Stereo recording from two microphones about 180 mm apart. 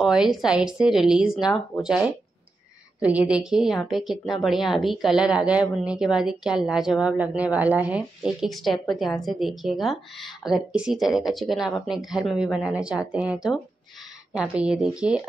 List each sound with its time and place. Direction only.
0.0 s a woman's voice: 5° right (ahead or behind)